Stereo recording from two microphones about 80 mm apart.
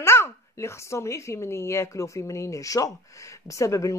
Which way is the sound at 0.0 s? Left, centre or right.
Left.